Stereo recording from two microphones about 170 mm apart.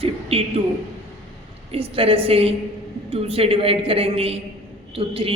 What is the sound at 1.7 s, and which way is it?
A man's voice, 35° right (ahead or behind).